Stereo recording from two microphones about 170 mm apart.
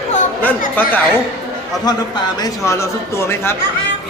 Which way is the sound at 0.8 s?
10° left (ahead or behind).